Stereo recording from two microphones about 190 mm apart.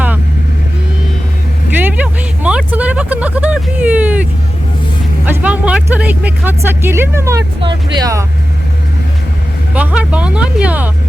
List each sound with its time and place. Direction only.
1.7 s vehicle: 10° right (ahead or behind)
5.2 s speech: 10° right (ahead or behind)
9.7 s speech: 5° right (ahead or behind)